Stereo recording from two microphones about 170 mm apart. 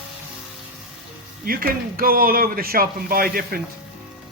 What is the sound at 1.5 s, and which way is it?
Speech, 60° right (ahead or behind).